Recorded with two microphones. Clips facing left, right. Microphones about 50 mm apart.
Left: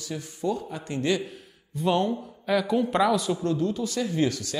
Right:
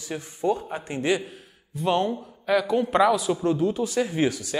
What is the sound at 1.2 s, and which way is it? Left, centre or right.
A man's voice, centre.